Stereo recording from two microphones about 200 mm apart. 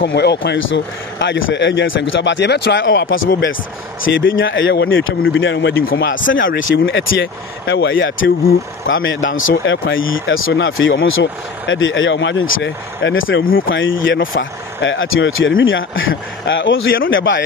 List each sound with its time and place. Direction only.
0.0 s speech: 55° left (ahead or behind)
4.0 s speech: 70° left (ahead or behind); by 6.2 s 50° left (ahead or behind)
6.4 s speech: 60° left (ahead or behind)
7.1 s speech: 55° left (ahead or behind)